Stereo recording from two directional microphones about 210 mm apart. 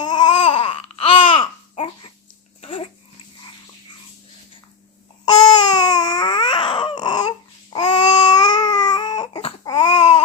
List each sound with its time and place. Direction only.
0.0 s baby cry: 20° left (ahead or behind)
0.3 s babbling: 25° left (ahead or behind)
2.6 s dog: 25° left (ahead or behind)
5.2 s baby cry: 20° left (ahead or behind)
9.8 s baby cry: 30° left (ahead or behind)